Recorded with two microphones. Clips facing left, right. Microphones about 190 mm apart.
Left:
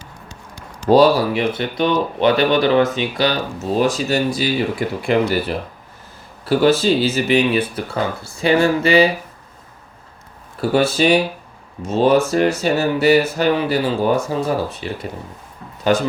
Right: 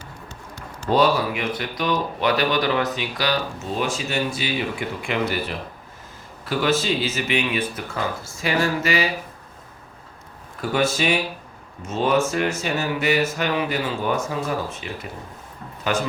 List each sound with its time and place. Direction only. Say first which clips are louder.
0.3 s run: even; 15° left (ahead or behind)
0.9 s speech: left 7 dB; 35° left (ahead or behind)
3.7 s speech: left 9 dB; 40° left (ahead or behind)
6.4 s speech: left 7 dB; 35° left (ahead or behind)
10.6 s speech: left 6 dB; 35° left (ahead or behind)